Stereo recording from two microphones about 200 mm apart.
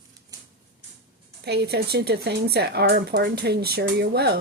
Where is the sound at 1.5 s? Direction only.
55° right (ahead or behind).